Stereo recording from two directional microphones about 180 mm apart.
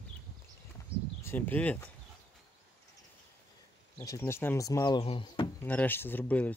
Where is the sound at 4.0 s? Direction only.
15° left (ahead or behind).